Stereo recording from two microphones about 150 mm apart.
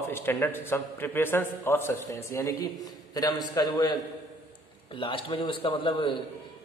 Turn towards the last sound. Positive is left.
turn(degrees=35)  # may be behind; listen again after turning